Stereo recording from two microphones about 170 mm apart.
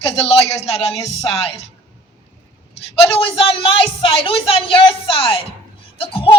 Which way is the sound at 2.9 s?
30° left (ahead or behind).